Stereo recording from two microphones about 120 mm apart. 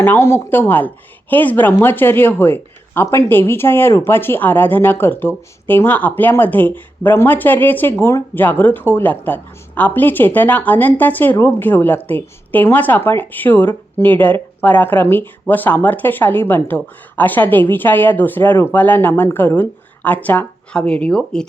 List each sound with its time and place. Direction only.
0.0 s speech: 20° left (ahead or behind)